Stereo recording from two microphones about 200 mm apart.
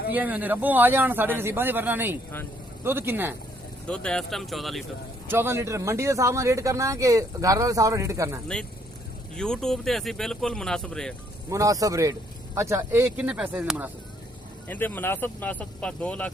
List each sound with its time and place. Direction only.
0.1 s speech: 10° right (ahead or behind)
3.8 s speech: 5° left (ahead or behind)
5.3 s speech: 10° right (ahead or behind)
9.3 s speech: 5° left (ahead or behind)
11.4 s speech: 15° right (ahead or behind)
14.7 s speech: 10° left (ahead or behind)